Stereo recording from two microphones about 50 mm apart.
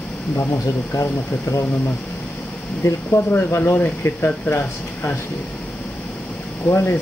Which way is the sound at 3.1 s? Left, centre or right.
Left.